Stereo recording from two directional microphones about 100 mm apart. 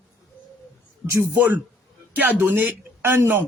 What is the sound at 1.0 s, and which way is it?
A man's voice, 20° right (ahead or behind).